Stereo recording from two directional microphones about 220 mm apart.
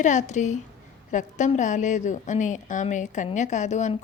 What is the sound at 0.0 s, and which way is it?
A woman's voice, 35° left (ahead or behind).